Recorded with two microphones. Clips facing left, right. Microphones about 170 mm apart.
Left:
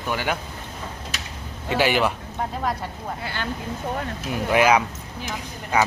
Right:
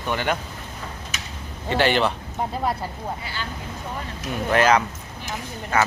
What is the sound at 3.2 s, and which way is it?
Speech, 55° left (ahead or behind).